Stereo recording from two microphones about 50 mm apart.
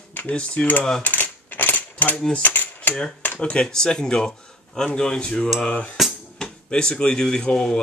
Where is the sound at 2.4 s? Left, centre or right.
Left.